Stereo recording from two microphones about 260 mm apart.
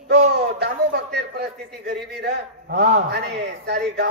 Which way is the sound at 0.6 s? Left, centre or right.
Right.